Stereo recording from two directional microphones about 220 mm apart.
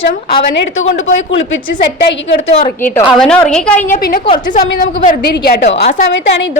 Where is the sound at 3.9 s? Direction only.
40° left (ahead or behind).